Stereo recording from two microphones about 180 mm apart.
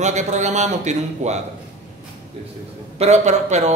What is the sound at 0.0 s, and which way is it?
Speech, 40° right (ahead or behind).